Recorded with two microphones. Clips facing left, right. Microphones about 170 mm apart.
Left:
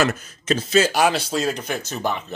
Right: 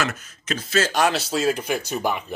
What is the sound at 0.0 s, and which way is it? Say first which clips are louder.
Speech: left 6 dB; 35° left (ahead or behind).